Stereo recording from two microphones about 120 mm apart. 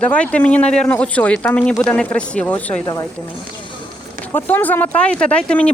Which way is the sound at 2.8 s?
25° left (ahead or behind).